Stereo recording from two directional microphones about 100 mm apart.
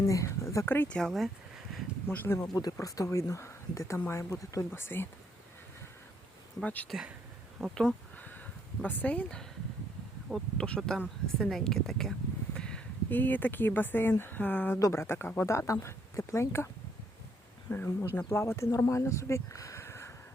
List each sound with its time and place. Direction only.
0.0 s speech: 30° left (ahead or behind)
0.9 s speech: centre (ahead or behind)
2.0 s speech: 20° left (ahead or behind)
2.5 s speech: 40° left (ahead or behind); by 5.0 s 20° left (ahead or behind)
6.6 s speech: 15° left (ahead or behind)
6.8 s speech: 5° right (ahead or behind)
8.8 s speech: 15° left (ahead or behind)
14.8 s speech: 35° left (ahead or behind)
15.0 s speech: 25° left (ahead or behind)
17.7 s speech: 20° left (ahead or behind)